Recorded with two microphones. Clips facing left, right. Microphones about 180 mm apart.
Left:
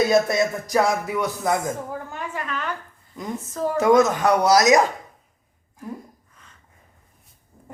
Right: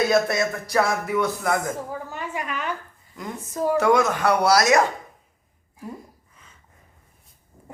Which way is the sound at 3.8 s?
20° left (ahead or behind).